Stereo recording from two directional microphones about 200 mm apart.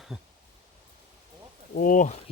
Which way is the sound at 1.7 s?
45° left (ahead or behind).